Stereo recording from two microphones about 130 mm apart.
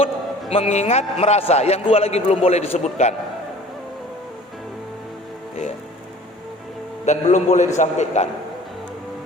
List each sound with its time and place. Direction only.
0.5 s a man's voice: 60° left (ahead or behind)
7.0 s a man's voice: 65° left (ahead or behind)